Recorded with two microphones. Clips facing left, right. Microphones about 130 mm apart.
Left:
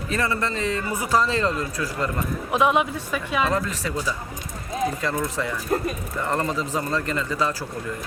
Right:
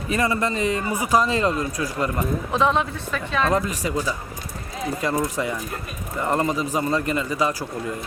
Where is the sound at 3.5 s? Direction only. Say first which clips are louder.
Right 3 dB; 15° right (ahead or behind).